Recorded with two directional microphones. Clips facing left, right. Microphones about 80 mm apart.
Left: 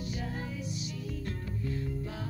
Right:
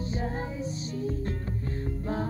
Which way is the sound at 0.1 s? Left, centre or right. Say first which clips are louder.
Right 5 dB; right.